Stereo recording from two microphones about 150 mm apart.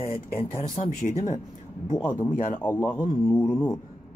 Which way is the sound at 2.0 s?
15° left (ahead or behind).